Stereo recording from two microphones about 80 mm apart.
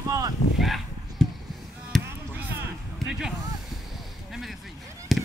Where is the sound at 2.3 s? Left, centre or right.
Right.